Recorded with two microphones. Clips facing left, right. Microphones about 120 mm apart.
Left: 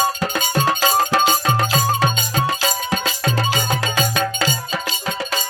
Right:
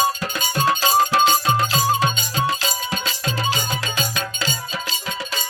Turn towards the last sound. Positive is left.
turn(degrees=50)  # may be behind; listen again after turning